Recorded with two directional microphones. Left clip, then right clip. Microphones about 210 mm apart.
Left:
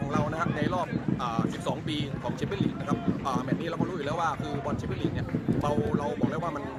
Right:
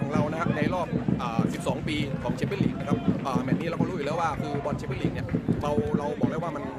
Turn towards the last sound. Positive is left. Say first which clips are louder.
# right 1 dB
turn(degrees=-5)  # may be behind; listen again after turning